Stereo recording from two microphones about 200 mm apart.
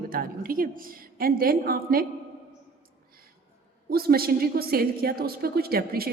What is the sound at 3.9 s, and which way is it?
A woman's voice, 50° right (ahead or behind).